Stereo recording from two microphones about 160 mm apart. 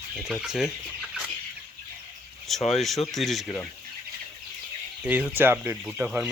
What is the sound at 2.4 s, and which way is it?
Speech, centre (ahead or behind).